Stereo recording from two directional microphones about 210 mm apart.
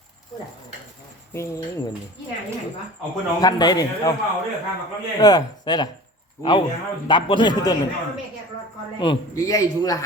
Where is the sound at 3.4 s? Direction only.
20° left (ahead or behind).